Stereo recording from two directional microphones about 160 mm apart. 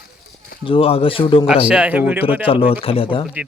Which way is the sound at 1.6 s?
5° right (ahead or behind).